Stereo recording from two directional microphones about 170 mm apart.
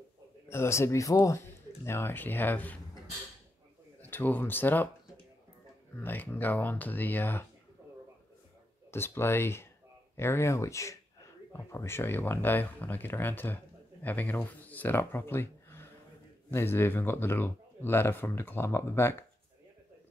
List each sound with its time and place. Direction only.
0.5 s speech: 15° left (ahead or behind)
4.0 s speech: 10° left (ahead or behind)
5.9 s speech: 10° left (ahead or behind)
8.9 s speech: 15° left (ahead or behind)